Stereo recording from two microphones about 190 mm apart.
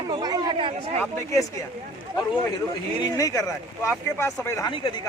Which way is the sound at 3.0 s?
20° left (ahead or behind).